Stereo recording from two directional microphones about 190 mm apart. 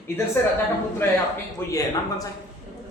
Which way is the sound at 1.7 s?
20° left (ahead or behind).